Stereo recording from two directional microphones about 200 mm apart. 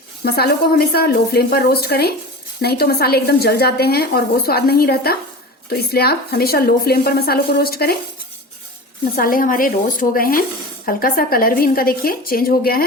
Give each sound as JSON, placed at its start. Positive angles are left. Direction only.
{"t": 0.3, "sound": "a woman's voice", "side_deg": 50}
{"t": 9.1, "sound": "a woman's voice", "side_deg": 45}